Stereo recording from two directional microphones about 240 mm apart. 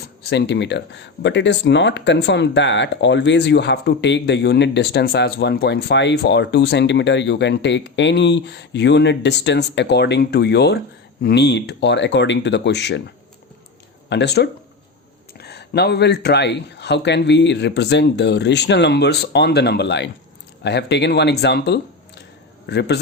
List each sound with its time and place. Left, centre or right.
0.3 s a man's voice: left